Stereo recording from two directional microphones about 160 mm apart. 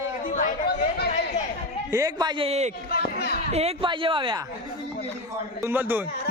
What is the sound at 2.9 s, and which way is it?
Chatter, 75° left (ahead or behind).